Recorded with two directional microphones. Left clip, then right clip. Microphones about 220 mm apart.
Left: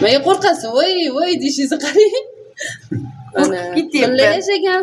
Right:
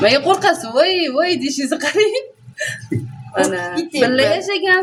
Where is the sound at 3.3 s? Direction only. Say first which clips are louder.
Left 1 dB; 10° right (ahead or behind).